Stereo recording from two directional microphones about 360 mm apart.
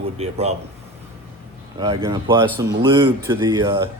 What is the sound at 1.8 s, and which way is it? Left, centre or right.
A man's voice, centre.